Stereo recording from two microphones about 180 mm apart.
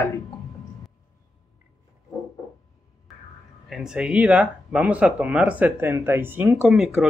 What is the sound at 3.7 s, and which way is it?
Speech, 5° right (ahead or behind).